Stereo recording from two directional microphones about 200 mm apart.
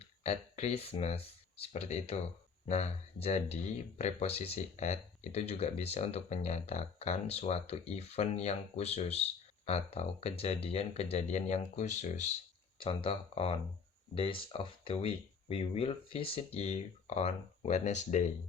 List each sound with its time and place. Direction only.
0.0 s speech: 30° left (ahead or behind)